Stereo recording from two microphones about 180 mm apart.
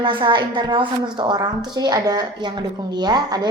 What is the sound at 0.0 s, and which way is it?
Speech, 25° right (ahead or behind).